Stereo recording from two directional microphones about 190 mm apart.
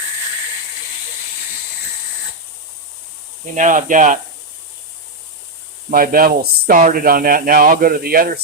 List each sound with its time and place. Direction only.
3.5 s speech: 40° right (ahead or behind)
5.9 s speech: 50° right (ahead or behind)